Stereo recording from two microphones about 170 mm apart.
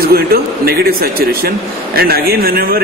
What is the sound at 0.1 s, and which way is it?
A woman's voice, 65° right (ahead or behind).